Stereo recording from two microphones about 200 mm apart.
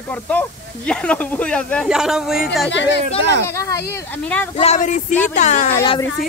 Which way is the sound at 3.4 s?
15° left (ahead or behind).